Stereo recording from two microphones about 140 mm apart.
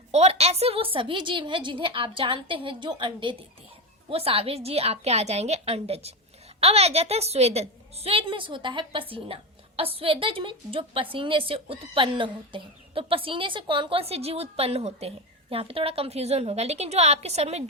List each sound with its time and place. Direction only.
0.1 s a woman's voice: 50° right (ahead or behind)